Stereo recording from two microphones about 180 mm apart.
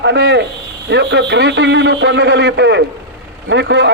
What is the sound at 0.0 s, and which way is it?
A man's voice, 70° right (ahead or behind).